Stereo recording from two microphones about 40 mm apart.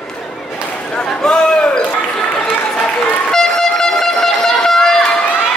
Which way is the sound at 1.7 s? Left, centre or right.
Left.